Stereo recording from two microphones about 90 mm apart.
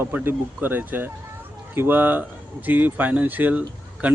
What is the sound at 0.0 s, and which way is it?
Speech, 25° right (ahead or behind).